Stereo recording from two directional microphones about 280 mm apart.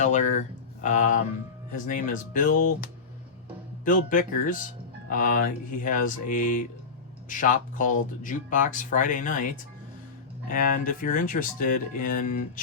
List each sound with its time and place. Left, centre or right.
0.0 s speech: left
10.5 s speech: left